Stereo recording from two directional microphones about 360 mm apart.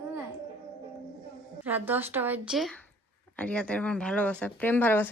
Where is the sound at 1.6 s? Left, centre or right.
Centre.